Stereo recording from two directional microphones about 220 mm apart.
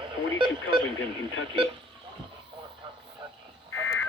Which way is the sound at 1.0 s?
65° left (ahead or behind).